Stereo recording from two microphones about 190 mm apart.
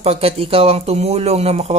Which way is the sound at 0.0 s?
30° right (ahead or behind).